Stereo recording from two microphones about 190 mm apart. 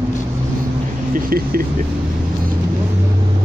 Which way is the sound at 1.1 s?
50° right (ahead or behind).